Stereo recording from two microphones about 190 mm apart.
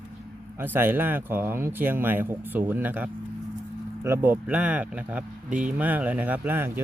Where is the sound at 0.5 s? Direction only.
10° right (ahead or behind).